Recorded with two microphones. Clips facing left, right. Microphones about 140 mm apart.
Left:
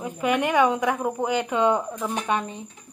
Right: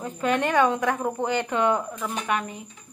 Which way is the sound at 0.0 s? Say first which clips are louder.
Left 1 dB; 10° left (ahead or behind).